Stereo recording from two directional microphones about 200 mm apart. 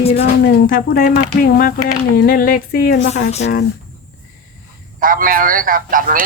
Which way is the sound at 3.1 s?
35° left (ahead or behind).